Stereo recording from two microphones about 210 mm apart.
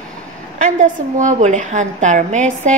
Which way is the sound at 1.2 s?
35° right (ahead or behind).